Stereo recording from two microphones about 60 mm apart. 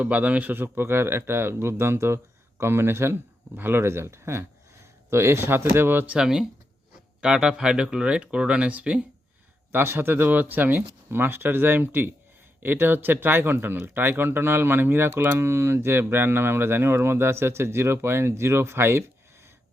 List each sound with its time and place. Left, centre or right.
0.0 s a man's voice: right
6.1 s speech: centre
9.7 s speech: right